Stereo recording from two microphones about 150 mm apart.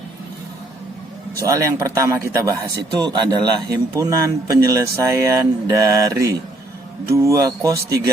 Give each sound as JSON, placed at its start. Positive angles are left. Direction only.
{"t": 1.4, "sound": "a man's voice", "side_deg": -20}